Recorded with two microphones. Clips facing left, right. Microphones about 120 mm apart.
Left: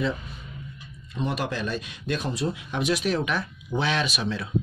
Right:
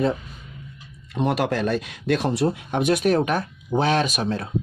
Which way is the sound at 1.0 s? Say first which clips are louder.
Right 6 dB; 70° right (ahead or behind).